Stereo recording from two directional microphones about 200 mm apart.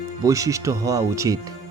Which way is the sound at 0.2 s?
15° right (ahead or behind).